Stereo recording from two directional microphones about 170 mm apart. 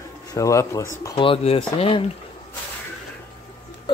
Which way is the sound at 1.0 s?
30° left (ahead or behind).